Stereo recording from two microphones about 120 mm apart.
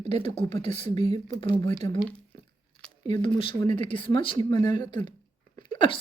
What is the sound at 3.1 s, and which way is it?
Speech, 45° left (ahead or behind).